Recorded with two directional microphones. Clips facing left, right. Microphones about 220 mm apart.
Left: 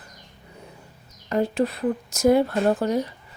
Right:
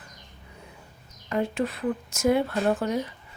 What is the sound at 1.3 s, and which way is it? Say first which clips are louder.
A woman's voice: left 4 dB; 35° left (ahead or behind).